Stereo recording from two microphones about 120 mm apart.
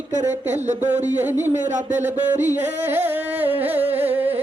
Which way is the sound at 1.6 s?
85° right.